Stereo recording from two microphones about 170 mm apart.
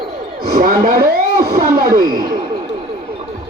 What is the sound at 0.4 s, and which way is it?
Speech, 55° right (ahead or behind).